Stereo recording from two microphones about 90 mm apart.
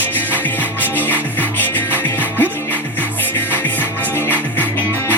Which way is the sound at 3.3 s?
20° left (ahead or behind).